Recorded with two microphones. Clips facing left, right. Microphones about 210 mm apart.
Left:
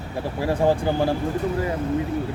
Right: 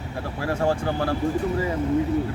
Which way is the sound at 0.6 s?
15° left (ahead or behind).